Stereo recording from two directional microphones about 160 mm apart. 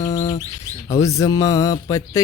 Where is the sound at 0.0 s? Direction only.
20° left (ahead or behind).